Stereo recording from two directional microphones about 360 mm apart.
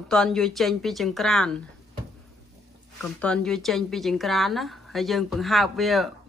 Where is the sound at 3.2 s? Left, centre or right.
Centre.